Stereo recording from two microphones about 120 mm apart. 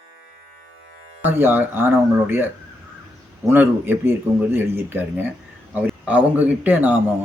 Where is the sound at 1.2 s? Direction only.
15° right (ahead or behind).